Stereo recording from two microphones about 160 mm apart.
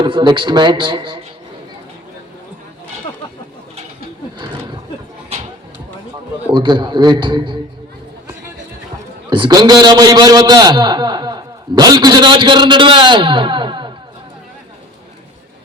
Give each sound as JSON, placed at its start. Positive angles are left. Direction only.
{"t": 0.0, "sound": "a man's voice", "side_deg": -30}
{"t": 6.5, "sound": "a man's voice", "side_deg": -30}
{"t": 9.3, "sound": "a man's voice", "side_deg": -25}